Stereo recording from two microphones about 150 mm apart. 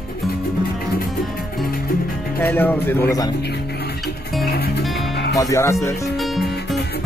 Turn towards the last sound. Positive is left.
turn(degrees=20)  # may be behind; listen again after turning